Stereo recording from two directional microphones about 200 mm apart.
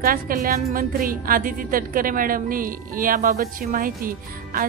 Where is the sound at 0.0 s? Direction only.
45° right (ahead or behind).